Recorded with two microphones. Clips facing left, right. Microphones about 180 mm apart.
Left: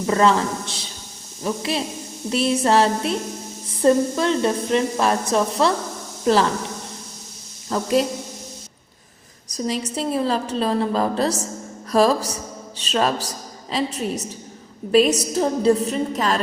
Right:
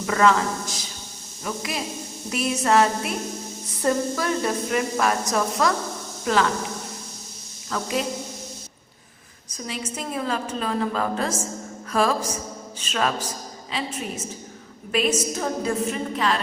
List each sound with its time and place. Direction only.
0.1 s speech: 30° left (ahead or behind)
7.7 s a woman's voice: 35° left (ahead or behind)
9.6 s a woman's voice: 35° left (ahead or behind)